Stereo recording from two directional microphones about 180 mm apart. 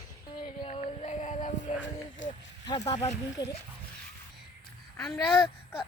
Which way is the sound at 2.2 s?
90° left.